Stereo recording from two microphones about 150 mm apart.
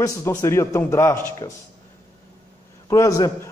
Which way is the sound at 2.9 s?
20° left (ahead or behind).